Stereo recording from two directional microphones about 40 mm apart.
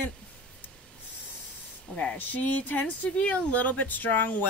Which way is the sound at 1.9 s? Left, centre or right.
Left.